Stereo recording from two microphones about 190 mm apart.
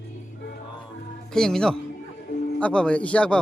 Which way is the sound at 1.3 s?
5° left (ahead or behind).